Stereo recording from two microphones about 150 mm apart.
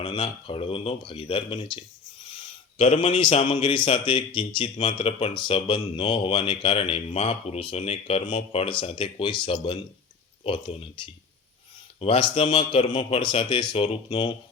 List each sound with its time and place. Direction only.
0.0 s speech: 35° left (ahead or behind)